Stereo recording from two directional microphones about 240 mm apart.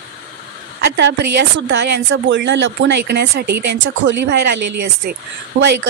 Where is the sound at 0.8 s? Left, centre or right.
Right.